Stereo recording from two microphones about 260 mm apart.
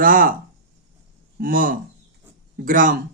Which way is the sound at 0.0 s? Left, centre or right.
Right.